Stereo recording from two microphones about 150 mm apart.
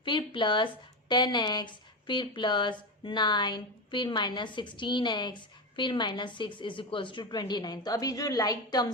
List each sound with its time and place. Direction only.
0.0 s speech: 30° left (ahead or behind)